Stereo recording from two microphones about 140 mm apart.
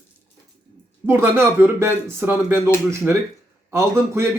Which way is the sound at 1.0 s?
15° right (ahead or behind).